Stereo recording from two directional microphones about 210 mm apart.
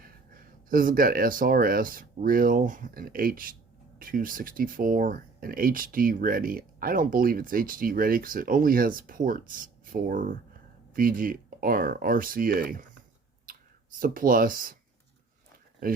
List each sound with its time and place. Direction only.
0.3 s speech: 40° right (ahead or behind)
13.5 s clicking: 40° right (ahead or behind)
14.0 s speech: 40° right (ahead or behind)